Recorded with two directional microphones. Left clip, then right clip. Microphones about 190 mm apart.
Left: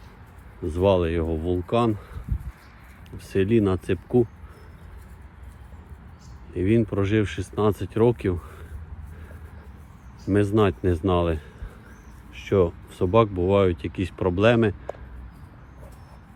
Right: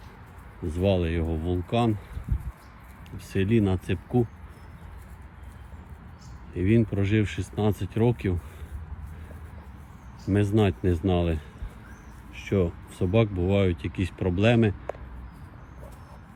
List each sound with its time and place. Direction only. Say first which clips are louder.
0.6 s speech: left 5 dB; 5° left (ahead or behind)
1.2 s speech: left 4 dB; 50° left (ahead or behind)
1.6 s speech: left 3 dB; 10° left (ahead or behind)
3.3 s speech: left 4 dB; 10° left (ahead or behind)
3.9 s speech: left 6 dB; 50° left (ahead or behind)
6.5 s speech: left 2 dB; centre (ahead or behind)
10.2 s speech: left 4 dB; 10° left (ahead or behind)
12.5 s speech: left 6 dB; 5° left (ahead or behind)